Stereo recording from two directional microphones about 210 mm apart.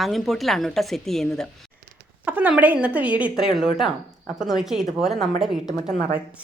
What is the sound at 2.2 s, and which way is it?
Speech, 10° right (ahead or behind).